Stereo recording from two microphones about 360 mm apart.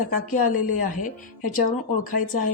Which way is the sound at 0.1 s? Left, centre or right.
Left.